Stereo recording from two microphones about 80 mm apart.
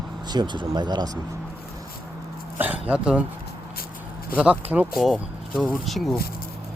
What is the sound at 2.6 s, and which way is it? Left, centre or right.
Speech, centre.